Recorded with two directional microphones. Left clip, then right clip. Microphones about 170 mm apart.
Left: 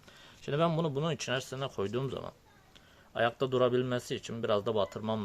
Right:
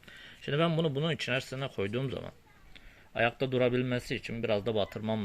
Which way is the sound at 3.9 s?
90° left.